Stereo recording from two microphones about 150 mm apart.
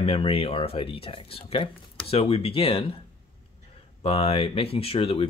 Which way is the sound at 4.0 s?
40° left (ahead or behind).